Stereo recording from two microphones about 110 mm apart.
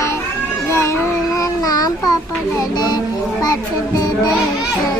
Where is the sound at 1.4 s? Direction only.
35° left (ahead or behind).